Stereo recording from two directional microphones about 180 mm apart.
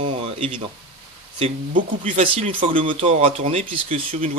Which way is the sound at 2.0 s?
35° right (ahead or behind).